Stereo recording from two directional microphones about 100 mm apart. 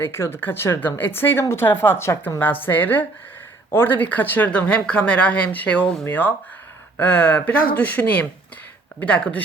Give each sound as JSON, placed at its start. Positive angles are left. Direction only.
{"t": 0.0, "sound": "speech", "side_deg": 25}